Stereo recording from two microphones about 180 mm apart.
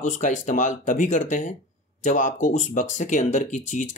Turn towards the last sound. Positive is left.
turn(degrees=45)  # may be behind; listen again after turning